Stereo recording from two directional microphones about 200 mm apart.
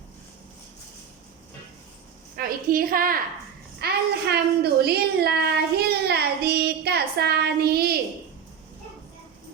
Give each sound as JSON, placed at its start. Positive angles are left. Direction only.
{"t": 2.3, "sound": "a woman's voice", "side_deg": -45}
{"t": 3.8, "sound": "child singing", "side_deg": -55}